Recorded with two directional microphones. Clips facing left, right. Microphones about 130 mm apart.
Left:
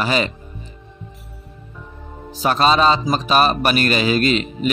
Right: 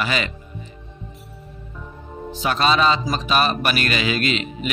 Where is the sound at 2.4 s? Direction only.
40° left (ahead or behind).